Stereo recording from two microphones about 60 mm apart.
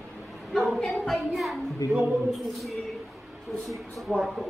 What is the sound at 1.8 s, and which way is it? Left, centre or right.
Speech, left.